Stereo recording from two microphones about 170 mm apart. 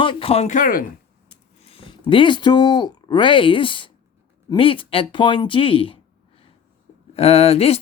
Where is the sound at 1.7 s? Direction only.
30° left (ahead or behind).